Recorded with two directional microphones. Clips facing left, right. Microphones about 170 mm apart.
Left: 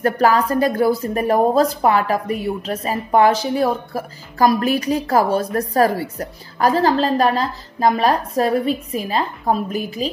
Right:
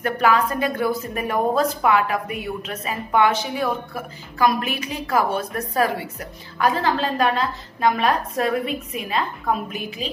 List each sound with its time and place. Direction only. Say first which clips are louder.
0.0 s a woman's voice: left 3 dB; 35° left (ahead or behind)